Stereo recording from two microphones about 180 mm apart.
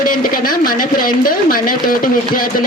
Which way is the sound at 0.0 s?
50° left (ahead or behind).